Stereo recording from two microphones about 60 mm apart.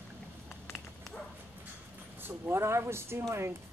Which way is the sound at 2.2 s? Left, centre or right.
Right.